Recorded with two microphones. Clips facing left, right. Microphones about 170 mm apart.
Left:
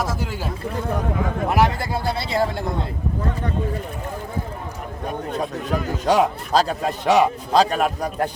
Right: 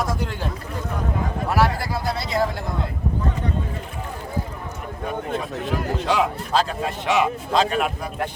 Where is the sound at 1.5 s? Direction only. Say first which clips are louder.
Left 1 dB; 20° left (ahead or behind).